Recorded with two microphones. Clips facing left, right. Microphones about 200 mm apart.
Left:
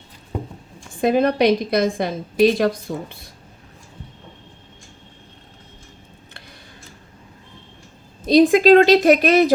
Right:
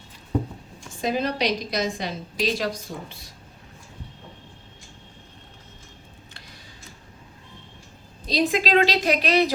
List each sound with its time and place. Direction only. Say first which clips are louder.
1.0 s a woman's voice: left 8 dB; 55° left (ahead or behind)
8.2 s a woman's voice: left 11 dB; 50° left (ahead or behind)